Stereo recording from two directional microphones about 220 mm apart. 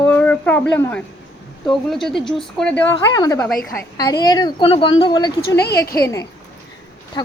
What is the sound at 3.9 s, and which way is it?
A woman's voice, 15° left (ahead or behind).